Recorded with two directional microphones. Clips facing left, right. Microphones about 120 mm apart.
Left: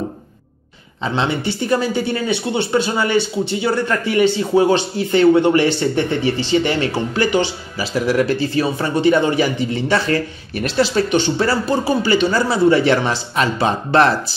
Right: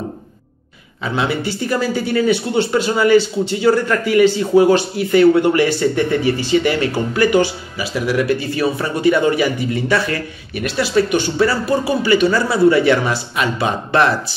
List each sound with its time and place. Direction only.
1.0 s speech: 25° left (ahead or behind)
7.7 s speech: 35° left (ahead or behind)